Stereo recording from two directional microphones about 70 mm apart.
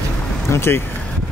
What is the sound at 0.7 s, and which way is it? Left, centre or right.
Speech, left.